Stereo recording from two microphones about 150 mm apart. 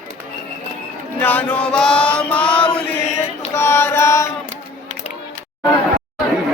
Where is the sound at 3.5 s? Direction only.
15° left (ahead or behind).